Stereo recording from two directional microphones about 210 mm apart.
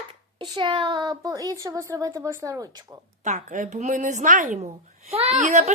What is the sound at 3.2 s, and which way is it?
A woman's voice, 35° right (ahead or behind).